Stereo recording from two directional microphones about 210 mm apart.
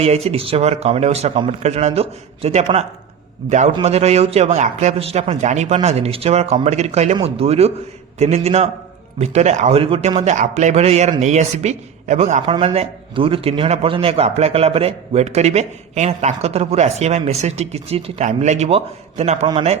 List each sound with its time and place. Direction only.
0.0 s a man's voice: 30° right (ahead or behind)